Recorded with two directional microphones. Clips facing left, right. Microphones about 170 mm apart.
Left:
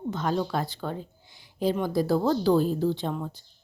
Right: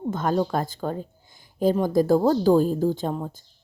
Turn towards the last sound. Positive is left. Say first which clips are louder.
# right 3 dB
turn(degrees=-45)  # may be behind; listen again after turning